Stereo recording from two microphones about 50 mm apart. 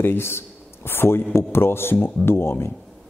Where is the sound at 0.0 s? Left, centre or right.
Left.